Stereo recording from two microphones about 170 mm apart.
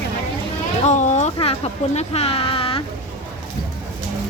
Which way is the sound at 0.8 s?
45° left (ahead or behind).